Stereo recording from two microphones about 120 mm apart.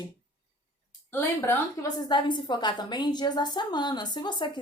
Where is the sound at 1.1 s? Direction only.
20° left (ahead or behind).